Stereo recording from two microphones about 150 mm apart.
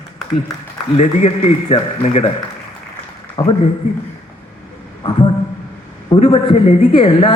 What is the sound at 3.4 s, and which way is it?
Speech, 35° left (ahead or behind).